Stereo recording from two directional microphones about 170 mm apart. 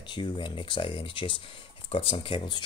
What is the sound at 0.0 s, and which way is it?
Speech, 25° left (ahead or behind).